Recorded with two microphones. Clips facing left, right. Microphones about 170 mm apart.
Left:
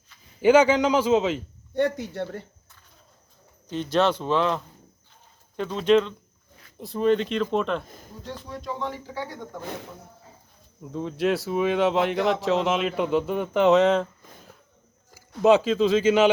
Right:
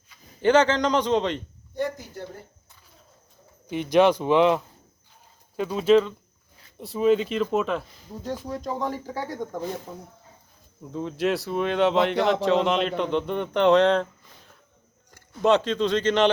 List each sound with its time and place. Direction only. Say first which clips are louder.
0.4 s a man's voice: left 2 dB; 10° left (ahead or behind)
1.7 s speech: left 5 dB; 70° left (ahead or behind)
3.7 s speech: right 4 dB; 15° right (ahead or behind)
8.4 s speech: right 1 dB; 45° right (ahead or behind)
10.9 s speech: left 1 dB; centre (ahead or behind)
15.4 s speech: left 3 dB; 5° left (ahead or behind)